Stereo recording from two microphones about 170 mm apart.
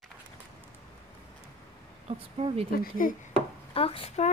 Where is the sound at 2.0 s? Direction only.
35° right (ahead or behind).